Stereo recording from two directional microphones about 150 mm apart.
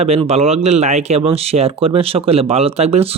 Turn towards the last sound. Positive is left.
turn(degrees=-45)  # may be behind; listen again after turning